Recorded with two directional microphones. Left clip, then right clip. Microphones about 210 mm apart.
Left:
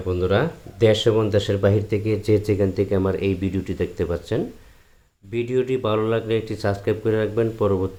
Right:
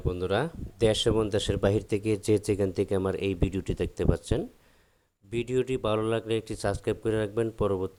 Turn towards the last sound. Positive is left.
turn(degrees=-45)  # may be behind; listen again after turning